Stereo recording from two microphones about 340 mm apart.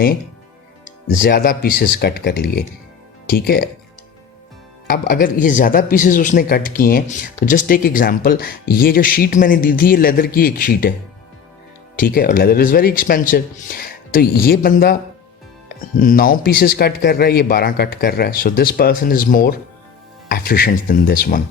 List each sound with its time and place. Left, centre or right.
1.2 s speech: left
4.9 s speech: left
11.9 s speech: left
16.0 s speech: left